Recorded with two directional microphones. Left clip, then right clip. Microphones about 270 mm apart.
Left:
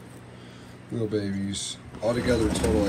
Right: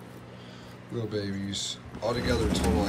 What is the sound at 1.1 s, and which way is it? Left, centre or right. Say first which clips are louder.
Speech: left 1 dB; centre.